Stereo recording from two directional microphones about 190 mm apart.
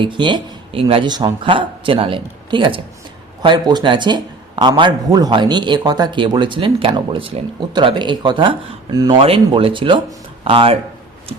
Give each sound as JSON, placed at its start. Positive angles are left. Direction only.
{"t": 0.0, "sound": "a man's voice", "side_deg": -25}